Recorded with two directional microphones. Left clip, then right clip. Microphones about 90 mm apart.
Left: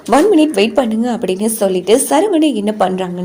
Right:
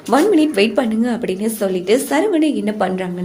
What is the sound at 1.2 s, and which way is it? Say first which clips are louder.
A woman's voice: left 4 dB; 85° left.